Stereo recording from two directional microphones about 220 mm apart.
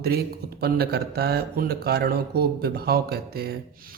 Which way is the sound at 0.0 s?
45° right (ahead or behind).